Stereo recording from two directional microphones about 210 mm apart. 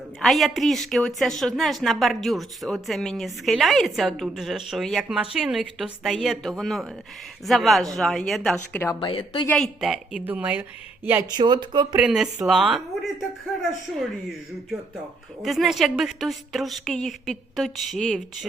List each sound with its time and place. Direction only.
0.2 s a woman's voice: centre (ahead or behind)
9.0 s a woman's voice: 25° left (ahead or behind)
9.5 s a woman's voice: centre (ahead or behind); by 11.9 s 20° right (ahead or behind)
11.9 s a woman's voice: 5° right (ahead or behind)